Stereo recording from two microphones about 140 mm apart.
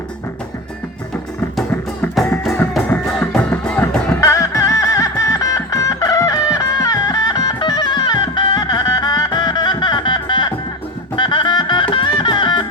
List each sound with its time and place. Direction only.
2.1 s music: centre (ahead or behind)
4.2 s music: 25° left (ahead or behind)